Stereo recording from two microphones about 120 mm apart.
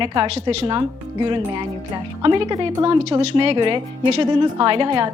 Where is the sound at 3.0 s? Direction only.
55° right (ahead or behind).